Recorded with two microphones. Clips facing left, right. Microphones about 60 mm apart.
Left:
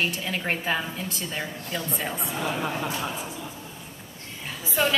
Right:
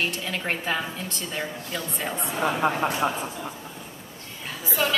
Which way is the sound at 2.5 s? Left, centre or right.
Right.